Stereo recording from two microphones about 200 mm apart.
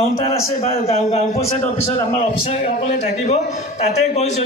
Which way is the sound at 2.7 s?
35° left (ahead or behind).